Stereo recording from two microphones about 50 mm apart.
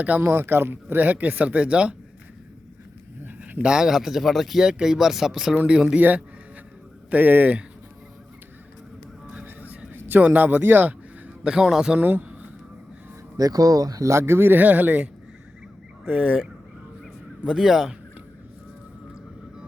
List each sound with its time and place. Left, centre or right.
0.2 s speech: right
3.6 s speech: centre
4.6 s speech: centre
5.6 s speech: centre
7.1 s speech: right
9.3 s a sound: right
10.0 s a man's voice: right
10.6 s speech: right
11.4 s speech: centre
11.9 s speech: right
14.0 s speech: right
17.4 s speech: centre